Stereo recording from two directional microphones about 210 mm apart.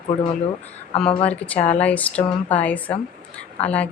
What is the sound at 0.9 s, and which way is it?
Speech, 30° left (ahead or behind).